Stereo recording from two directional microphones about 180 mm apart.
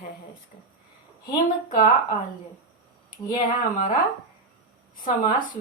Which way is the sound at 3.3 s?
45° left (ahead or behind).